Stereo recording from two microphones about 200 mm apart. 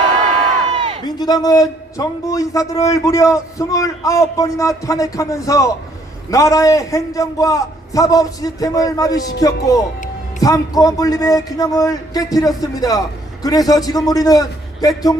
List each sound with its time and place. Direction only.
1.0 s a man's voice: 20° left (ahead or behind)